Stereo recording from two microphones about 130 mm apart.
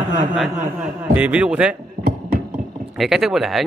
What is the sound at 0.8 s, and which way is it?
A man's voice, 10° right (ahead or behind).